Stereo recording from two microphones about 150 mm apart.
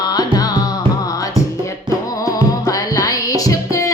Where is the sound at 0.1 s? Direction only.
25° left (ahead or behind).